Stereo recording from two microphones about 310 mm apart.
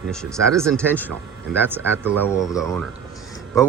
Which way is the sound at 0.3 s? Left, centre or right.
Centre.